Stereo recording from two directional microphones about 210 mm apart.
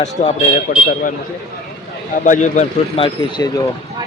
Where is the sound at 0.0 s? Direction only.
30° left (ahead or behind).